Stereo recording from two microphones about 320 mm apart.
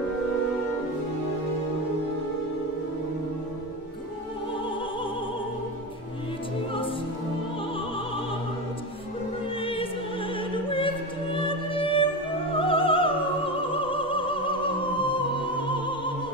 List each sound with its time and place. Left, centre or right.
9.6 s opera: centre
11.3 s music: centre
15.7 s opera: centre